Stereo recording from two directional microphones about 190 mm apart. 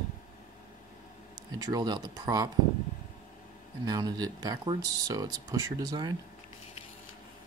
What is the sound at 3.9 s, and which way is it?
Speech, 20° right (ahead or behind).